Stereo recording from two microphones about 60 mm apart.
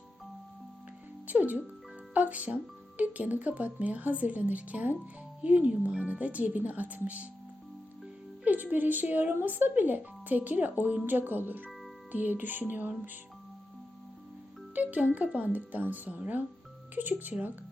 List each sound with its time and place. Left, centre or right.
1.3 s a woman's voice: right
8.4 s a woman's voice: right
14.8 s a woman's voice: right